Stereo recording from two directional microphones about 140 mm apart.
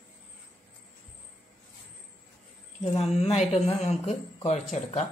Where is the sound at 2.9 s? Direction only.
50° left (ahead or behind).